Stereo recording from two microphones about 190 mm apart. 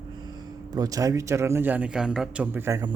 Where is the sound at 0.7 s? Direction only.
20° right (ahead or behind).